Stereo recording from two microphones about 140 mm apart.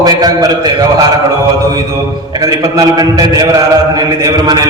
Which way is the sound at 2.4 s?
25° right (ahead or behind).